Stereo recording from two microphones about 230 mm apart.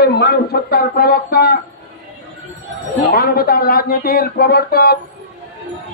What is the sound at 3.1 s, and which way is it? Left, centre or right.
Speech, left.